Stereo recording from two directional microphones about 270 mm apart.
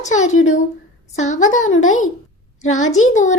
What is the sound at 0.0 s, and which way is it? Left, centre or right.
A woman's voice, left.